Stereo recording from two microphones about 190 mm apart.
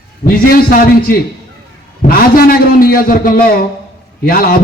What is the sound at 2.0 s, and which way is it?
A man's voice, 50° left (ahead or behind).